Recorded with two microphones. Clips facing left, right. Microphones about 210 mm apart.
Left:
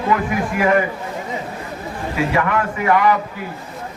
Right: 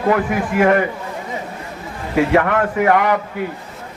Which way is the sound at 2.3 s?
55° right (ahead or behind).